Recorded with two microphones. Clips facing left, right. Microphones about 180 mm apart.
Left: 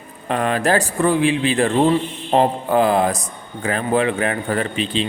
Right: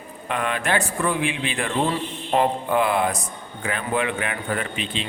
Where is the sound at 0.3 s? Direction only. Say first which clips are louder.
Left 6 dB; 35° left (ahead or behind).